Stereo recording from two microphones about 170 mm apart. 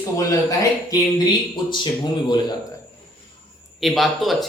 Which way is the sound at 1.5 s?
25° left (ahead or behind).